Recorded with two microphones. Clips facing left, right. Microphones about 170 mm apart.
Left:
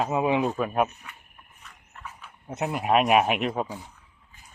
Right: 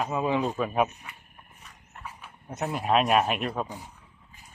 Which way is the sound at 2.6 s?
10° left (ahead or behind).